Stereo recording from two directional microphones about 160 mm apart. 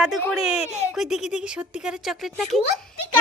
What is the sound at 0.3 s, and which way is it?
Speech, 5° right (ahead or behind).